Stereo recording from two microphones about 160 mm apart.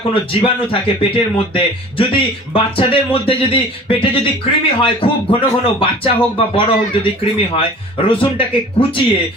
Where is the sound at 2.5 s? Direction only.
35° left (ahead or behind).